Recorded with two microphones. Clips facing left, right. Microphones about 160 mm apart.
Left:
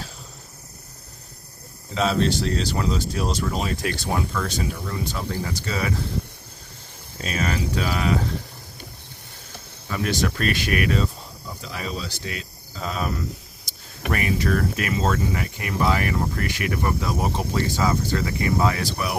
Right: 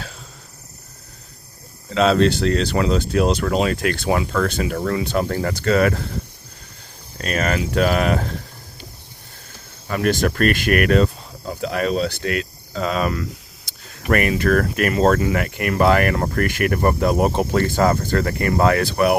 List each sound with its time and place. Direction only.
1.9 s speech: 85° right; by 6.0 s 65° right (ahead or behind)
7.2 s speech: 65° right (ahead or behind)
9.9 s speech: 55° right (ahead or behind); by 13.2 s 90° right
14.1 s speech: 65° right (ahead or behind)